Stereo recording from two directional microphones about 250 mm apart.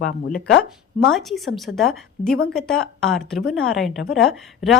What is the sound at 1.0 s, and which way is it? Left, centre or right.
A woman's voice, centre.